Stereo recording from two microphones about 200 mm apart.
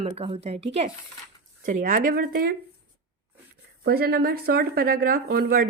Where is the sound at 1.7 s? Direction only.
40° right (ahead or behind).